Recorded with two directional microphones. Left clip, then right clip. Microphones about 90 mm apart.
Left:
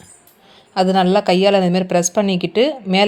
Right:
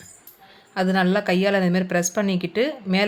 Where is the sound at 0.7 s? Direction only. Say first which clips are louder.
Left 7 dB; 35° left (ahead or behind).